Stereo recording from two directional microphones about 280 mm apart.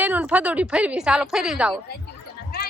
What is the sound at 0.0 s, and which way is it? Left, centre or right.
A woman's voice, centre.